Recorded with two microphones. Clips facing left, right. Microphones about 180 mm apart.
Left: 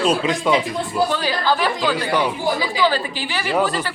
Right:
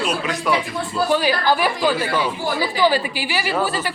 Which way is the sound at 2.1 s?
15° left (ahead or behind).